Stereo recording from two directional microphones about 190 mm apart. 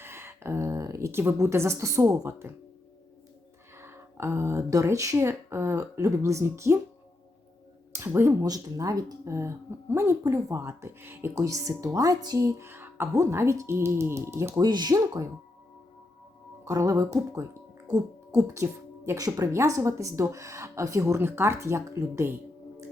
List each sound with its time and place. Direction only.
0.0 s a woman's voice: 10° right (ahead or behind)
3.8 s speech: 15° right (ahead or behind)
7.9 s speech: 15° right (ahead or behind)
16.6 s speech: 15° right (ahead or behind)